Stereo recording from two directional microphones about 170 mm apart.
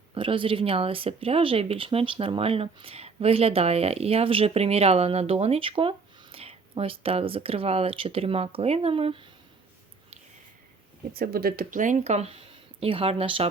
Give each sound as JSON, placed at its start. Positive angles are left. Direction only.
{"t": 0.1, "sound": "speech", "side_deg": -30}
{"t": 11.1, "sound": "speech", "side_deg": -60}